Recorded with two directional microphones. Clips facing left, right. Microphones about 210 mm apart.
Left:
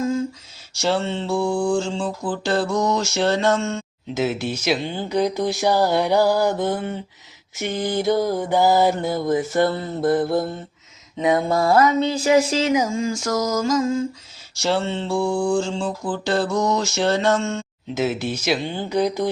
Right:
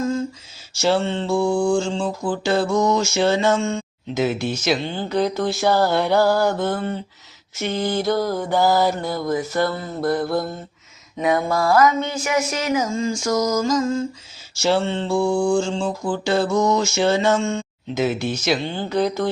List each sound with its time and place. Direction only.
0.7 s mantra: 5° right (ahead or behind); by 12.7 s 30° left (ahead or behind)
12.7 s mantra: 10° left (ahead or behind)